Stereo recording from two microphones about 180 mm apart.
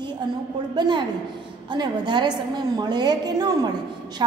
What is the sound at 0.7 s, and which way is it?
A woman's voice, 25° right (ahead or behind).